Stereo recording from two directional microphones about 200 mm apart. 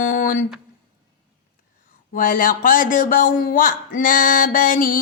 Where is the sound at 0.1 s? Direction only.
40° left (ahead or behind).